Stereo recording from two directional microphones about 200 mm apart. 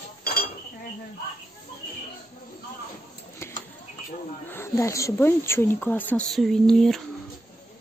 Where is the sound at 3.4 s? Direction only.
15° left (ahead or behind).